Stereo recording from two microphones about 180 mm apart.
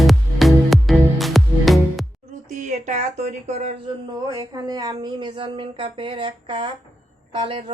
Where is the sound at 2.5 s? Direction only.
45° right (ahead or behind).